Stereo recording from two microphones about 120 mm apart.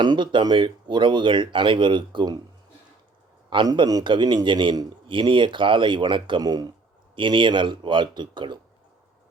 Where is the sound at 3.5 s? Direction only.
40° right (ahead or behind).